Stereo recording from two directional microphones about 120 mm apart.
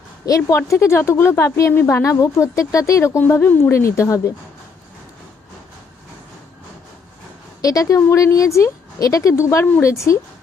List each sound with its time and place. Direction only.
0.3 s a woman's voice: 30° left (ahead or behind)
7.6 s a woman's voice: 30° left (ahead or behind)